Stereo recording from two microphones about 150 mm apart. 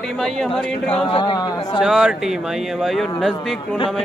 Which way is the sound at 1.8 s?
5° right (ahead or behind).